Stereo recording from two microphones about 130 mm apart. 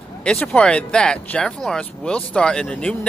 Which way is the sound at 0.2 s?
5° left (ahead or behind).